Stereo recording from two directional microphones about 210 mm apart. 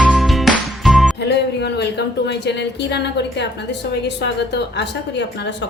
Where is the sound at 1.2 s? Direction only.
55° left (ahead or behind).